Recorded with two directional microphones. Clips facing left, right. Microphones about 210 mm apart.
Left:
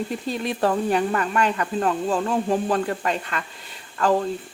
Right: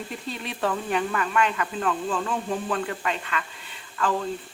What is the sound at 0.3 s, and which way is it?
Speech, 40° left (ahead or behind).